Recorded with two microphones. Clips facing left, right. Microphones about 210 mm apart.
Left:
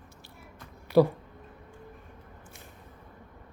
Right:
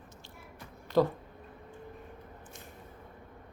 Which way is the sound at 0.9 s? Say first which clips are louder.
Left 5 dB; 10° left (ahead or behind).